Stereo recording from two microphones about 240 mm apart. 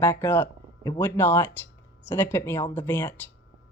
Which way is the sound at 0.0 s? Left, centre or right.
Centre.